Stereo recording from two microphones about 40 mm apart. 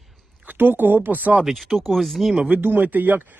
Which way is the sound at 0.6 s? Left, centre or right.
Right.